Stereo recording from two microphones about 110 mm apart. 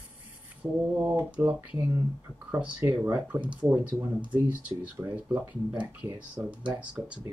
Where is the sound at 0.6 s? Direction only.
10° right (ahead or behind).